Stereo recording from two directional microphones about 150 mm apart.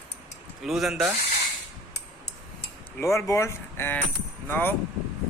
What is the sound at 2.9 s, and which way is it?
Speech, 20° left (ahead or behind).